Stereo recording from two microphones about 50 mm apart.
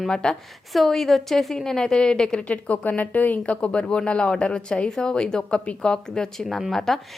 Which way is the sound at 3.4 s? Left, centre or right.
Left.